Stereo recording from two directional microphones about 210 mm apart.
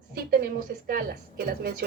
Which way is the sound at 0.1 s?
45° right (ahead or behind).